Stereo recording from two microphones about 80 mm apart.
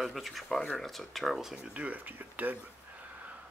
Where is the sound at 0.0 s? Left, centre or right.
Centre.